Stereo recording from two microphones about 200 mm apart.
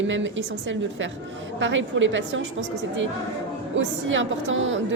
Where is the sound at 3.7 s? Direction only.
70° right (ahead or behind).